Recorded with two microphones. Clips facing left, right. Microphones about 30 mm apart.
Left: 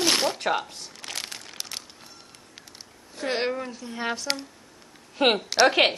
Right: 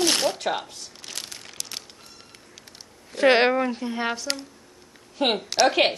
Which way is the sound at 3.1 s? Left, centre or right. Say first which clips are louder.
Right 11 dB; right.